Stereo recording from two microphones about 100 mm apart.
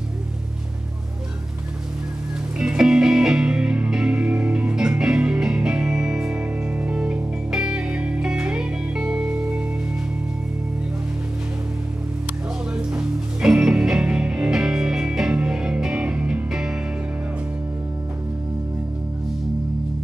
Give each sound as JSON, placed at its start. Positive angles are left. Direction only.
{"t": 2.6, "sound": "music", "side_deg": -10}
{"t": 12.7, "sound": "music", "side_deg": -10}